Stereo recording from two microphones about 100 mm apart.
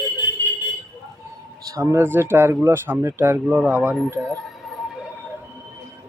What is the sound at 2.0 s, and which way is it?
Speech, 20° right (ahead or behind).